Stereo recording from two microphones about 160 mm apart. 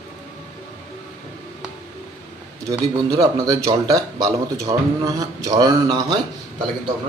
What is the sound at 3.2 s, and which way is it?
A man's voice, 20° right (ahead or behind).